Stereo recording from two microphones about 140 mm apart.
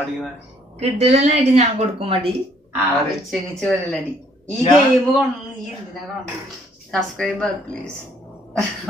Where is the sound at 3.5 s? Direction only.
5° left (ahead or behind).